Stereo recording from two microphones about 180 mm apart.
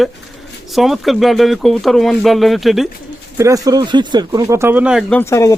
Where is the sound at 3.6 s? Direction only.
25° right (ahead or behind); by 5.0 s 5° right (ahead or behind).